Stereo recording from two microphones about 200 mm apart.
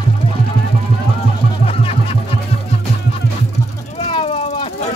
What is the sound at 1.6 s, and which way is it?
Music, 30° left (ahead or behind).